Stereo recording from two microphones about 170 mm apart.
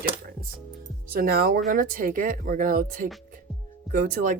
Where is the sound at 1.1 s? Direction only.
60° right (ahead or behind).